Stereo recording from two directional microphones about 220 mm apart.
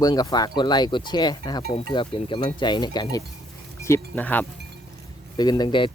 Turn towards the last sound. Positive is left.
turn(degrees=20)  # may be behind; listen again after turning